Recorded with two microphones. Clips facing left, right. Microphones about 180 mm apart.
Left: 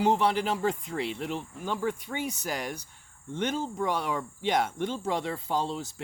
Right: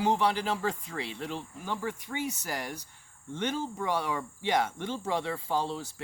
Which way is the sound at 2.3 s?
15° left (ahead or behind).